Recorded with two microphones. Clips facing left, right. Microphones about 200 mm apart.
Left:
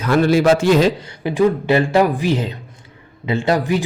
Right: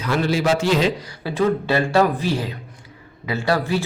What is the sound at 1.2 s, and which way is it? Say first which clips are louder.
A man's voice: left 4 dB; 15° left (ahead or behind).